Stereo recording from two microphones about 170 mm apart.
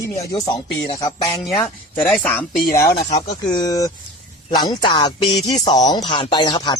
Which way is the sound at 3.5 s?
20° left (ahead or behind).